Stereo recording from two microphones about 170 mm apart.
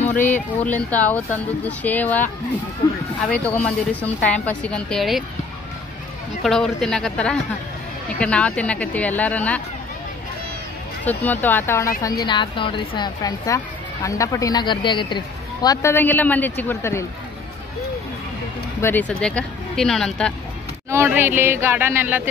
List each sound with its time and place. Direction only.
0.2 s speech: 10° left (ahead or behind)
6.4 s speech: 5° left (ahead or behind)
11.1 s speech: 10° left (ahead or behind)
18.8 s speech: 10° left (ahead or behind)
20.9 s speech: 15° right (ahead or behind)